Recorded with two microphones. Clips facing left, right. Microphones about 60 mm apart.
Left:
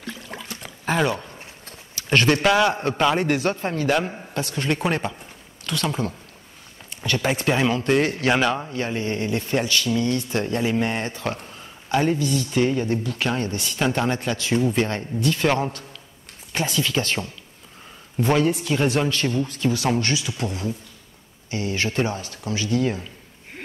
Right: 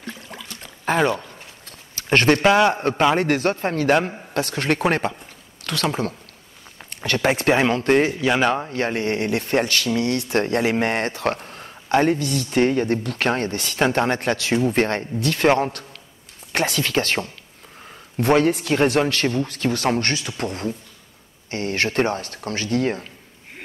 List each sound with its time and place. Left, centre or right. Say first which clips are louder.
0.3 s rowboat: left 2 dB; left
2.0 s speech: right 2 dB; right
2.4 s a man's voice: right 3 dB; right
3.2 s speech: right 2 dB; right
5.6 s a sound: right 2 dB; right
5.9 s speech: right 4 dB; right
8.1 s speech: even; centre
8.7 s speech: right 3 dB; right
16.5 s speech: right 2 dB; right
18.4 s speech: right 3 dB; right